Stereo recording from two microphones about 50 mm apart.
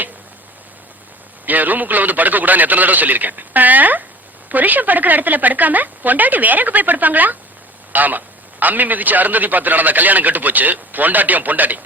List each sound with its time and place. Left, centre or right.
1.5 s a man's voice: right